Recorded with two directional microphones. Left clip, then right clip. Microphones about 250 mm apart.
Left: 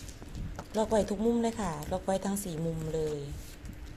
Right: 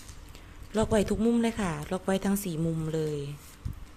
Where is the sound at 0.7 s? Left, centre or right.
Right.